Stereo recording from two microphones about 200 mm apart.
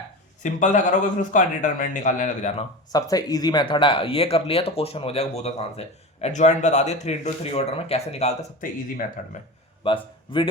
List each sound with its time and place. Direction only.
0.4 s speech: 40° left (ahead or behind)
2.9 s speech: 20° left (ahead or behind); by 9.3 s 40° left (ahead or behind)
9.8 s speech: 25° left (ahead or behind)